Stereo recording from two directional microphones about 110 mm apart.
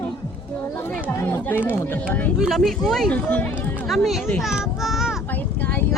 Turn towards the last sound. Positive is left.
turn(degrees=-5)  # may be behind; listen again after turning